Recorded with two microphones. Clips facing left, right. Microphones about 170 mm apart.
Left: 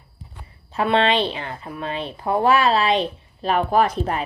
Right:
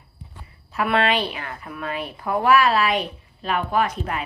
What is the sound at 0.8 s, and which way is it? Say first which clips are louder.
Speech: left 2 dB; 25° left (ahead or behind).